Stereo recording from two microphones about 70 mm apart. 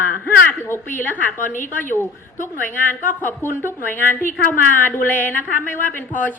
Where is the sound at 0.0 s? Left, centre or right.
Left.